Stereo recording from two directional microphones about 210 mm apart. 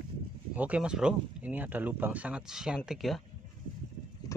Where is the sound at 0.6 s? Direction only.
5° right (ahead or behind).